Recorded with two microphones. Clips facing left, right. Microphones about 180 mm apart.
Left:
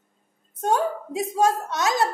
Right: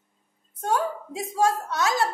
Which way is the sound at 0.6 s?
20° left (ahead or behind).